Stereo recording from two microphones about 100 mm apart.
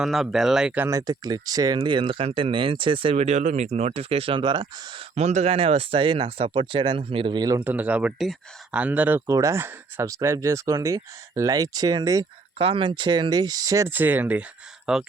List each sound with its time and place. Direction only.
0.0 s speech: centre (ahead or behind)
0.9 s speech: 40° right (ahead or behind)
1.8 s speech: 60° right (ahead or behind)
5.1 s speech: 90° right; by 7.3 s 65° right (ahead or behind)
7.3 s speech: 40° right (ahead or behind)
7.6 s speech: 15° right (ahead or behind)
9.3 s speech: 30° right (ahead or behind)
12.5 s speech: 65° right (ahead or behind); by 13.8 s 40° right (ahead or behind)
13.8 s speech: 20° right (ahead or behind)